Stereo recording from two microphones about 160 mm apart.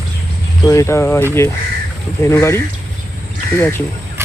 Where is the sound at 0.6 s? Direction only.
20° left (ahead or behind).